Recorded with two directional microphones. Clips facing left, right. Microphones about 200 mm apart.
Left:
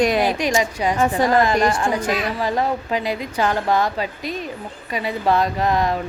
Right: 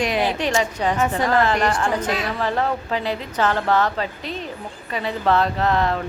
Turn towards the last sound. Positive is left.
turn(degrees=15)  # may be behind; listen again after turning